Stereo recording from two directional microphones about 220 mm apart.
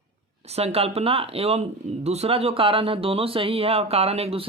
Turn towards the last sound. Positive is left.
turn(degrees=-25)  # may be behind; listen again after turning